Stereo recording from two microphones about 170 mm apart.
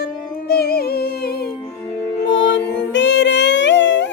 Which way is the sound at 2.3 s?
90° left.